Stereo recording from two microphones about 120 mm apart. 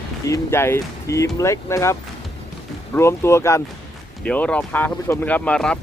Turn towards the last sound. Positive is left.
turn(degrees=10)  # may be behind; listen again after turning